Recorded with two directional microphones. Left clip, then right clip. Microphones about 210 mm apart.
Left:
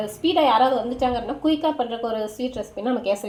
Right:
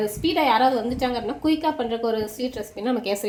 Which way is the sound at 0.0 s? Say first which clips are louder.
Left 2 dB; 30° right (ahead or behind).